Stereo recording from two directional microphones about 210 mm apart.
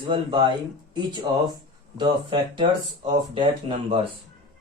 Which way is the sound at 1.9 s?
25° right (ahead or behind).